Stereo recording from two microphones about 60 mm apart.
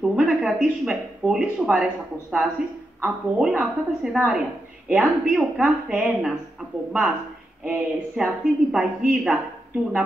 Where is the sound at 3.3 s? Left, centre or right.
Centre.